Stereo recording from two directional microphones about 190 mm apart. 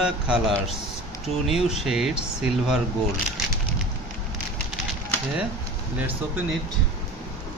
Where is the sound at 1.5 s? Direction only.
Centre (ahead or behind).